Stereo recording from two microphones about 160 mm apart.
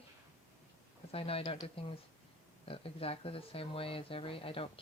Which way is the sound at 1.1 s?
35° left (ahead or behind).